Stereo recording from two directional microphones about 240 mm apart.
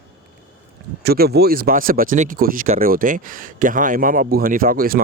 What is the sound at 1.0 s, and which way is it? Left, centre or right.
Speech, right.